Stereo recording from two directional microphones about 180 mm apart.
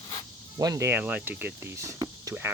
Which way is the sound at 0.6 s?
15° right (ahead or behind).